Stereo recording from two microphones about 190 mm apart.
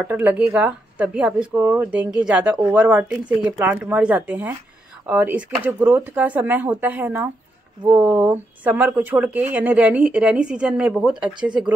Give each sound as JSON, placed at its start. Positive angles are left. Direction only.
{"t": 0.0, "sound": "speech", "side_deg": -10}